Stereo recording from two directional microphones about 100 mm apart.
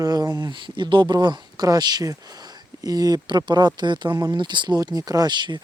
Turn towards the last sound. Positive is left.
turn(degrees=-50)  # may be behind; listen again after turning